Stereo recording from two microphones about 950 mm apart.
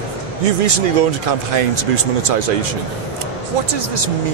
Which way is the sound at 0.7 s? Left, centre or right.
Right.